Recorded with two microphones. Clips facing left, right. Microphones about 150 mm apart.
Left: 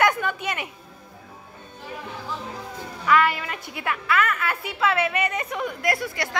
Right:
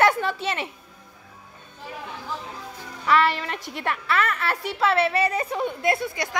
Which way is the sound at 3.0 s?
35° right (ahead or behind).